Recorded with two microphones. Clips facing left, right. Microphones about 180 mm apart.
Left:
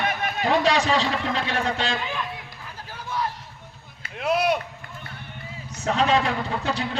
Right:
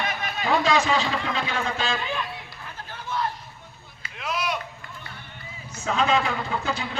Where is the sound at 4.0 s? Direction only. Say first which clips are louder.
Left 7 dB; 55° left (ahead or behind).